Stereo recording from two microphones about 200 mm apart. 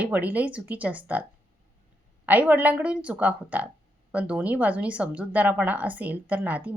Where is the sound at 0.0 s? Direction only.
10° right (ahead or behind).